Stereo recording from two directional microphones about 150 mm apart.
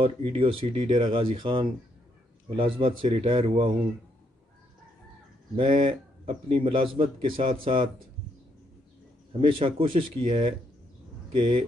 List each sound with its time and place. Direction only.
0.0 s a man's voice: 40° right (ahead or behind)
5.6 s a man's voice: 35° right (ahead or behind)
9.4 s a man's voice: 35° right (ahead or behind)